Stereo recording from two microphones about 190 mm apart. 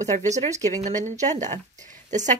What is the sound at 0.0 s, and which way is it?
A woman's voice, 40° right (ahead or behind).